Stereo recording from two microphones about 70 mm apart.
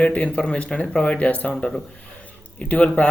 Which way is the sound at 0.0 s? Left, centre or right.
Centre.